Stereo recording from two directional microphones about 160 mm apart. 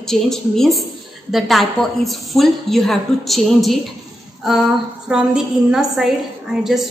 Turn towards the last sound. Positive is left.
turn(degrees=0)  # may be behind; listen again after turning